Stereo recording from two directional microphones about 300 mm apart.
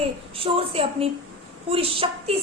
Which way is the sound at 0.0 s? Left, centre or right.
Centre.